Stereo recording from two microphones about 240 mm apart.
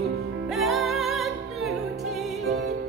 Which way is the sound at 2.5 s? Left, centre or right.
Right.